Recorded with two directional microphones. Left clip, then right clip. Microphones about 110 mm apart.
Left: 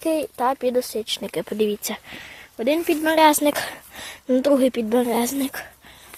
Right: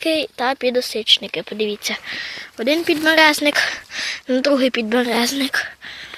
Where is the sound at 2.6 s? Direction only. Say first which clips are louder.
Right 3 dB; centre (ahead or behind).